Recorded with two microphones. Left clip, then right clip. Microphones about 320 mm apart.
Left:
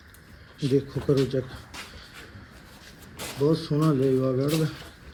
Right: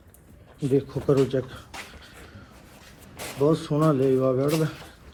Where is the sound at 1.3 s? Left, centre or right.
Centre.